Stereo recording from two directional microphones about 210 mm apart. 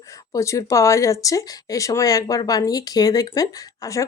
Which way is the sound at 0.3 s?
15° left (ahead or behind).